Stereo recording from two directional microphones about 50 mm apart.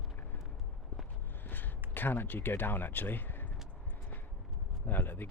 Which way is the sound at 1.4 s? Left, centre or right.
Left.